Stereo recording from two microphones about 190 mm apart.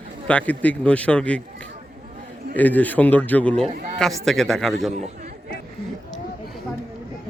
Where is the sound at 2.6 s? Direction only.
10° left (ahead or behind).